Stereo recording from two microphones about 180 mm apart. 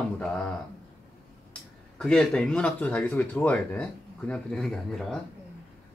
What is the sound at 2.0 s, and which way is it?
Speech, 5° left (ahead or behind).